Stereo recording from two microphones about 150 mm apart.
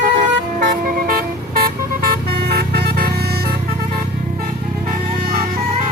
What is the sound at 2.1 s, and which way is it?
Vehicle, 90° right.